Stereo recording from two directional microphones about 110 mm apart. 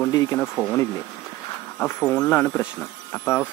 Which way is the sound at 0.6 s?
15° right (ahead or behind).